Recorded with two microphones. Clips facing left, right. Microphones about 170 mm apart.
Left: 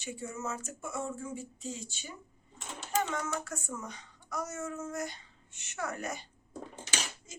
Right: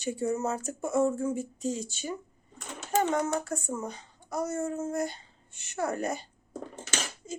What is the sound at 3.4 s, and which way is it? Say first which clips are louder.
Speech: right 7 dB; 30° right (ahead or behind).